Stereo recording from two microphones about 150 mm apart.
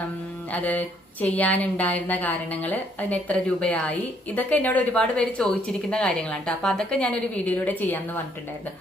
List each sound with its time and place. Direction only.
0.5 s speech: 10° left (ahead or behind)